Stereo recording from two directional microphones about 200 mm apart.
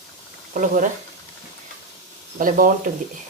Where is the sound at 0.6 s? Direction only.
40° right (ahead or behind).